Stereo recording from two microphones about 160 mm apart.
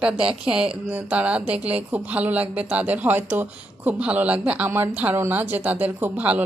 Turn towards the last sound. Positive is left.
turn(degrees=-10)  # may be behind; listen again after turning